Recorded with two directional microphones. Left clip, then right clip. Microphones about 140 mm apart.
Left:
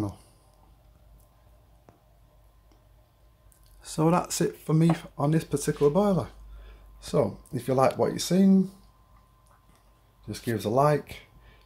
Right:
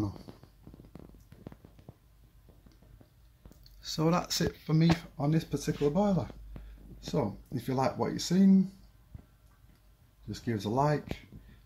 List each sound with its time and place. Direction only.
3.9 s speech: 20° left (ahead or behind)
10.3 s speech: 15° left (ahead or behind)